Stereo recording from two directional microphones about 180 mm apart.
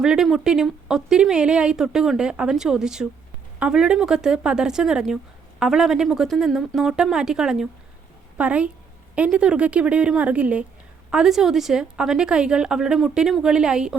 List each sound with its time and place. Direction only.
0.0 s a woman's voice: 5° right (ahead or behind)